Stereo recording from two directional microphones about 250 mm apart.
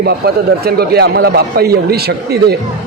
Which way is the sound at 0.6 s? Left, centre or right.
Right.